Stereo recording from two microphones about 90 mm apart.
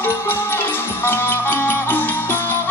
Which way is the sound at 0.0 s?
25° left (ahead or behind).